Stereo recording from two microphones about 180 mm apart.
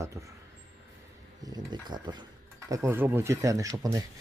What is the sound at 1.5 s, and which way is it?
Speech, 25° right (ahead or behind).